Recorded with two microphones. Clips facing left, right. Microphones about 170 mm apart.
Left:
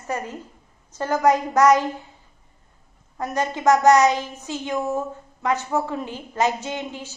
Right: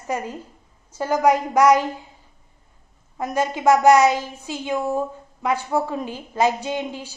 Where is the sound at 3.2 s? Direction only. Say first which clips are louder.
Right 2 dB; 15° right (ahead or behind).